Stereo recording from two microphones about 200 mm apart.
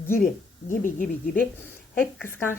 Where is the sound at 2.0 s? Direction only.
10° left (ahead or behind).